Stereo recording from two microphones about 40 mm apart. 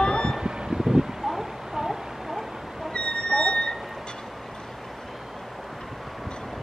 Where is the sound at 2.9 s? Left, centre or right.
Left.